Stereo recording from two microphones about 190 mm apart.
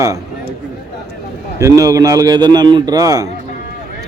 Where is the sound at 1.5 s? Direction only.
15° right (ahead or behind).